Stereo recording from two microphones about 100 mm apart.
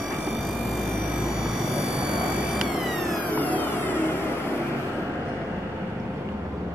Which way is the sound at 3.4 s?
15° left (ahead or behind).